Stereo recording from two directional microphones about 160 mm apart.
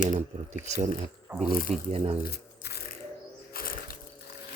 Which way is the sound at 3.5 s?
65° left (ahead or behind).